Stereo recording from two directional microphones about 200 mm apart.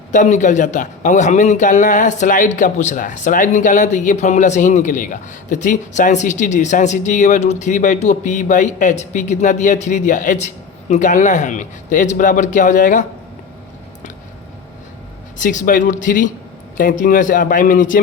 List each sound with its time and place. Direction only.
0.1 s a man's voice: 40° left (ahead or behind)
15.4 s a man's voice: 40° left (ahead or behind)